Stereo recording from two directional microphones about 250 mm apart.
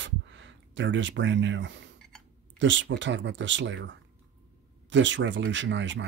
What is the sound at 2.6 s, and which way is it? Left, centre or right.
Speech, right.